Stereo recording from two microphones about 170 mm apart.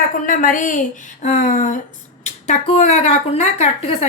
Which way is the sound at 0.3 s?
50° left (ahead or behind).